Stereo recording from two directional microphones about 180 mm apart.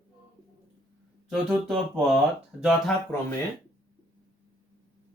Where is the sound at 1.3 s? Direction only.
Centre (ahead or behind).